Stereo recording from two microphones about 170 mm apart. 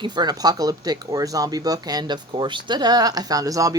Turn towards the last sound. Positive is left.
turn(degrees=-20)  # may be behind; listen again after turning